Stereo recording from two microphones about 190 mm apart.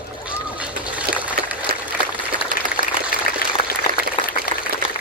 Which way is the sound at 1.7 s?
55° right (ahead or behind).